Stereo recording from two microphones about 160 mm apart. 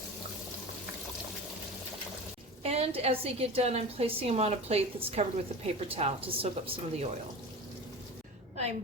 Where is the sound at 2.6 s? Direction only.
40° right (ahead or behind).